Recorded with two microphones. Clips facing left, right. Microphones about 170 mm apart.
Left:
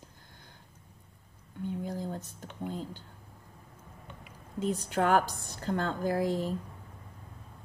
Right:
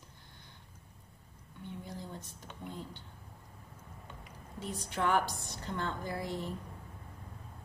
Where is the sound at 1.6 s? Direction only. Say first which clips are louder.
Left 9 dB; 45° left (ahead or behind).